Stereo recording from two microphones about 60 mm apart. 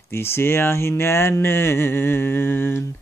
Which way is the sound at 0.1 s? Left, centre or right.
Left.